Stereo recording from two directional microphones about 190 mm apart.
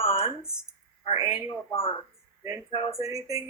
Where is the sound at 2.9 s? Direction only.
20° right (ahead or behind).